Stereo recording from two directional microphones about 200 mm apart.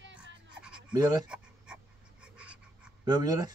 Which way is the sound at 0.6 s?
5° right (ahead or behind).